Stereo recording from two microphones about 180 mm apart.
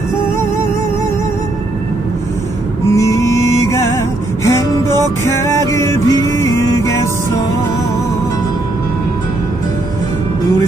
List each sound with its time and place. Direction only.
2.9 s music: 15° left (ahead or behind)